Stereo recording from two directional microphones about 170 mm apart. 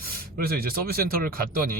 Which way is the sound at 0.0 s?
60° right (ahead or behind).